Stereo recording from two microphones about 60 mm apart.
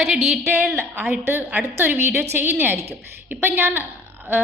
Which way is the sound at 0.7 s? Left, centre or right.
Right.